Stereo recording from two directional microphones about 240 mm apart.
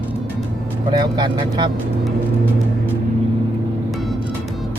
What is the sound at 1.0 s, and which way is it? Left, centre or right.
Speech, centre.